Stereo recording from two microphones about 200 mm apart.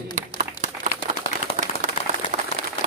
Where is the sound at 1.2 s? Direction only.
25° left (ahead or behind).